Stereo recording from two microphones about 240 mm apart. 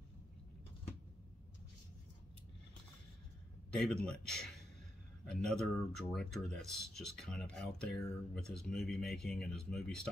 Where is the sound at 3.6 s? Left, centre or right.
Centre.